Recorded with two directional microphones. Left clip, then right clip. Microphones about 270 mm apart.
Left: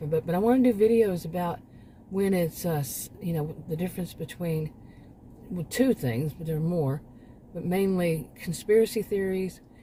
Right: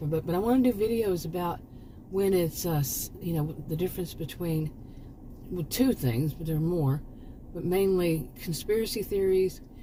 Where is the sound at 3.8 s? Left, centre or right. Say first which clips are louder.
Right 2 dB; centre.